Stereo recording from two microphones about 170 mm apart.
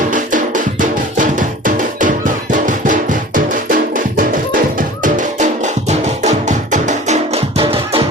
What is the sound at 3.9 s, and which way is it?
Drum, 55° right (ahead or behind).